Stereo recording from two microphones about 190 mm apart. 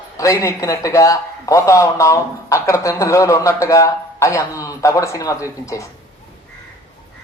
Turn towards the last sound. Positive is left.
turn(degrees=15)  # may be behind; listen again after turning